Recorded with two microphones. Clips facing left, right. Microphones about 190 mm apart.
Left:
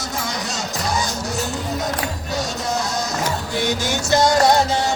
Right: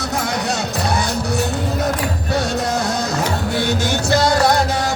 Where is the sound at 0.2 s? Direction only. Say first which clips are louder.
Right 5 dB; 60° right (ahead or behind).